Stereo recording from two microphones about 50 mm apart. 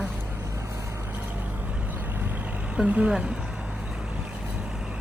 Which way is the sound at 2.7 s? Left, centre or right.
Right.